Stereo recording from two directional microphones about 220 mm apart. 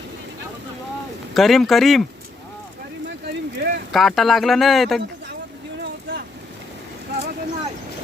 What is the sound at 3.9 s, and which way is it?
Speech, centre (ahead or behind).